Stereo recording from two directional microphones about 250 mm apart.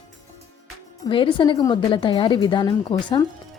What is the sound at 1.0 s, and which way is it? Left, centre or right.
A woman's voice, centre.